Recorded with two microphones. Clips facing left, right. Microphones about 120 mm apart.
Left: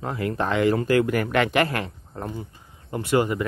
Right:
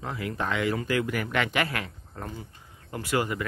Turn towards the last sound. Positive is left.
turn(degrees=25)  # may be behind; listen again after turning